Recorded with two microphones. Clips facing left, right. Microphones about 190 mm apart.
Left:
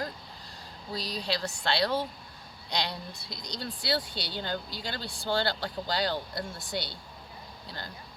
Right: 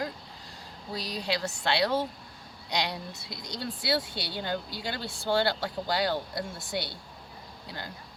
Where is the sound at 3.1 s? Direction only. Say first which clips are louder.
Right 1 dB; 5° right (ahead or behind).